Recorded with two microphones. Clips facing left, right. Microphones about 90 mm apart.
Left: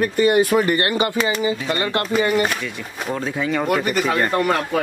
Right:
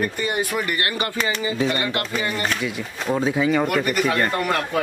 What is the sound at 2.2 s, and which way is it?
Speech, 20° left (ahead or behind).